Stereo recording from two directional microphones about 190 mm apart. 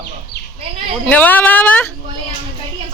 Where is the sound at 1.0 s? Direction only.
10° left (ahead or behind).